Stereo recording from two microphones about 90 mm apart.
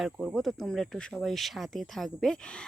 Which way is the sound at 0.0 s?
5° right (ahead or behind).